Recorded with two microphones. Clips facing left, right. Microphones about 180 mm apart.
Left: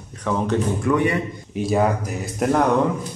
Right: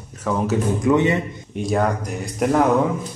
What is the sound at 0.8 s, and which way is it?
Speech, 25° right (ahead or behind).